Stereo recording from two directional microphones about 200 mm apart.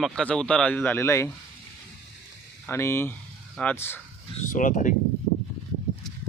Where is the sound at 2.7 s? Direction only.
10° left (ahead or behind).